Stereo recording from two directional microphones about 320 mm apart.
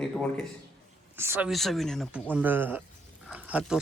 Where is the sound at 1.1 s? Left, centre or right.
Centre.